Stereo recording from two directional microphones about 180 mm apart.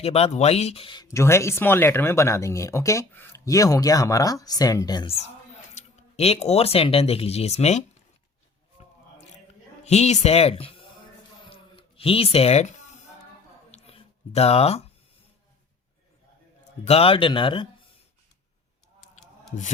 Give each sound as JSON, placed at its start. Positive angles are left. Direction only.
{"t": 0.0, "sound": "speech", "side_deg": 35}
{"t": 1.0, "sound": "speech", "side_deg": 15}
{"t": 8.8, "sound": "a sound", "side_deg": 40}
{"t": 9.8, "sound": "speech", "side_deg": 35}
{"t": 11.4, "sound": "a sound", "side_deg": 30}
{"t": 16.8, "sound": "speech", "side_deg": 35}